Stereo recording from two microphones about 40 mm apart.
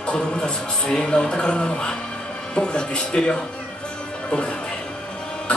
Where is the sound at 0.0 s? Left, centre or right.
Left.